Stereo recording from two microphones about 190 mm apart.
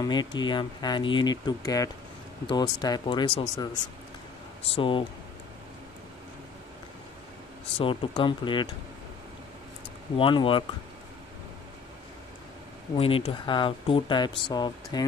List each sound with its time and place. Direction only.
0.0 s speech: 20° left (ahead or behind)
4.7 s speech: 25° left (ahead or behind)
7.8 s speech: 25° left (ahead or behind)
10.1 s speech: 30° left (ahead or behind)
12.9 s speech: 30° left (ahead or behind)